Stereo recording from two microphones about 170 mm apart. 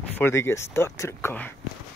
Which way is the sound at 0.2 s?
15° left (ahead or behind).